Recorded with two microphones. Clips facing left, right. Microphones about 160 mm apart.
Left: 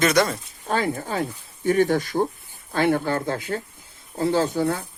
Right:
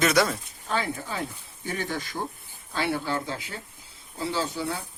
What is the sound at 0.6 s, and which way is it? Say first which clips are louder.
Speech: left 5 dB; 45° left (ahead or behind).